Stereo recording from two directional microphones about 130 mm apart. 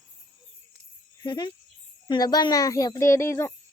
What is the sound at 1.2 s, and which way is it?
Speech, 35° left (ahead or behind).